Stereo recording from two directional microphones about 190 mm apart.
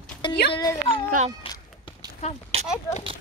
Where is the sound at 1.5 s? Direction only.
25° left (ahead or behind).